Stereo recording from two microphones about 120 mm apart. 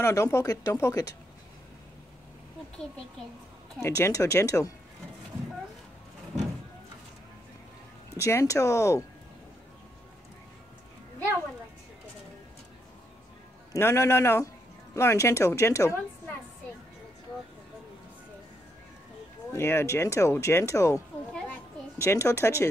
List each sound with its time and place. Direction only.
0.0 s speech: 25° left (ahead or behind)
3.8 s speech: 25° left (ahead or behind)
8.2 s speech: 25° left (ahead or behind)
13.7 s speech: 20° left (ahead or behind)
19.5 s speech: 20° left (ahead or behind)
21.3 s children playing: 10° left (ahead or behind)
21.9 s speech: 25° left (ahead or behind)